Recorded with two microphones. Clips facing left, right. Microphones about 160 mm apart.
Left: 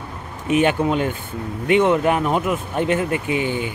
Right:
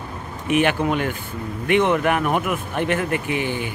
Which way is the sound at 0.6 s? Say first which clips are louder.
Left 2 dB; 25° left (ahead or behind).